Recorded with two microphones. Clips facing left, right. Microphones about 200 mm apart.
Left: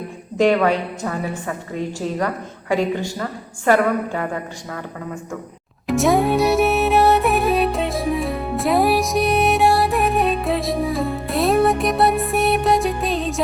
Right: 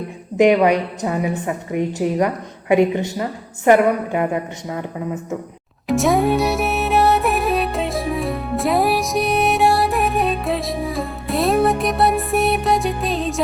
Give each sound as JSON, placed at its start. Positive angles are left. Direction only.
{"t": 0.3, "sound": "a woman's voice", "side_deg": -15}
{"t": 5.9, "sound": "music", "side_deg": 0}